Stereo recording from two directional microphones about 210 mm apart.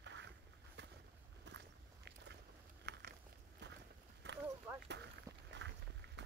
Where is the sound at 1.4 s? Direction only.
55° right (ahead or behind).